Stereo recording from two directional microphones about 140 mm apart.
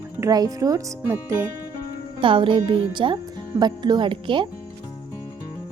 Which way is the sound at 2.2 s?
35° right (ahead or behind).